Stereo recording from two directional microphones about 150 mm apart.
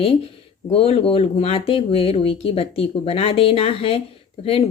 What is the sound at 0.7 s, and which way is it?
Speech, 40° left (ahead or behind).